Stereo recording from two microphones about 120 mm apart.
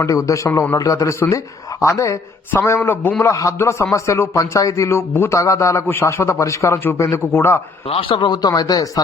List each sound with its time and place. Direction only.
0.0 s speech: 25° left (ahead or behind)
7.9 s a man's voice: 50° left (ahead or behind); by 8.9 s 30° left (ahead or behind)